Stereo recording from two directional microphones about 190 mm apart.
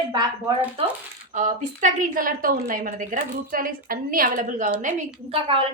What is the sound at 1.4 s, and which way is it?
A woman's voice, 40° right (ahead or behind).